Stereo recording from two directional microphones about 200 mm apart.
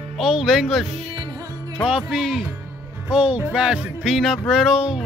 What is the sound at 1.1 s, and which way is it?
Music, 20° right (ahead or behind).